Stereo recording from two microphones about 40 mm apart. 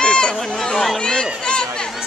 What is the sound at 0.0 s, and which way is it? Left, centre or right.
Chatter, left.